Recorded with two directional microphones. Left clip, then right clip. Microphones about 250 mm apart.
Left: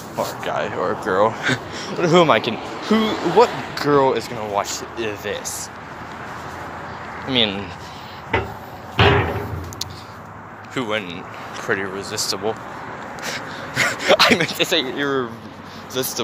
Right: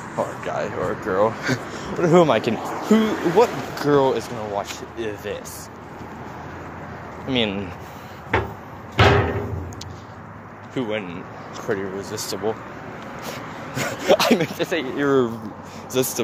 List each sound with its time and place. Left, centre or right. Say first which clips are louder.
0.2 s a man's voice: left 2 dB; centre
3.4 s speech: left 2 dB; right
3.7 s speech: left 1 dB; centre
7.2 s a man's voice: left 3 dB; centre
8.9 s a sound: left 1 dB; centre
10.7 s a man's voice: left 3 dB; centre
13.2 s a sound: left 5 dB; right
14.6 s speech: left 5 dB; centre
16.0 s speech: right 2 dB; right